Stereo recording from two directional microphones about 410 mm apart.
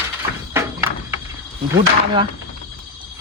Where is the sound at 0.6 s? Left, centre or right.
Centre.